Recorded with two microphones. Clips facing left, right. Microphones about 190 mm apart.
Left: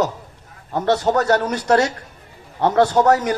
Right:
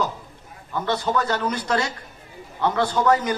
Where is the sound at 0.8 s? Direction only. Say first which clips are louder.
Left 6 dB; 70° left (ahead or behind).